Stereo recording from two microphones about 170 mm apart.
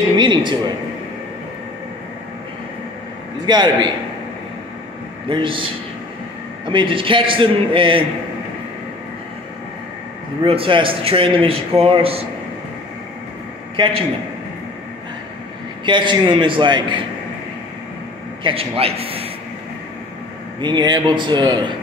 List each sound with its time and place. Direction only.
0.2 s speech: 25° right (ahead or behind)
3.4 s a man's voice: 25° right (ahead or behind)
5.3 s speech: 30° right (ahead or behind)
6.7 s speech: 30° right (ahead or behind)
10.4 s speech: 35° right (ahead or behind)
13.8 s a man's voice: 30° right (ahead or behind)
15.8 s a man's voice: 30° right (ahead or behind)
18.4 s speech: 35° right (ahead or behind)
20.6 s a man's voice: 25° right (ahead or behind)